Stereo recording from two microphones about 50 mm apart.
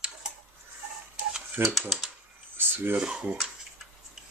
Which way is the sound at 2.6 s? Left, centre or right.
Right.